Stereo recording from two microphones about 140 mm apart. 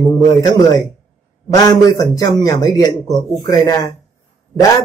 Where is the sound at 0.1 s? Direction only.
30° left (ahead or behind).